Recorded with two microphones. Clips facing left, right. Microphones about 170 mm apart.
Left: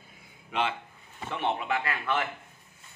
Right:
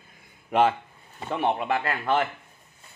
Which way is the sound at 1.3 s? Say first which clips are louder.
Right 5 dB; 40° right (ahead or behind).